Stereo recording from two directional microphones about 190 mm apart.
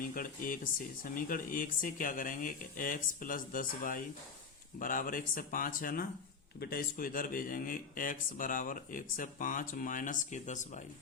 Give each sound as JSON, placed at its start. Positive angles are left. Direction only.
{"t": 0.0, "sound": "speech", "side_deg": 45}